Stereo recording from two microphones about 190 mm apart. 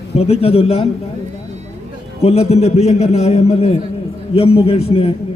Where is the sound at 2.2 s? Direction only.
35° left (ahead or behind).